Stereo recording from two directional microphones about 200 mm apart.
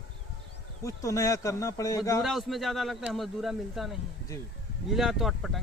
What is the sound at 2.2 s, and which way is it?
Speech, centre (ahead or behind).